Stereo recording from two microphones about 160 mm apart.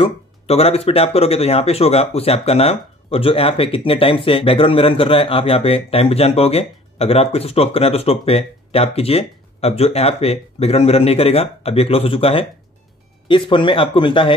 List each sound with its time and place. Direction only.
0.0 s speech: 40° left (ahead or behind)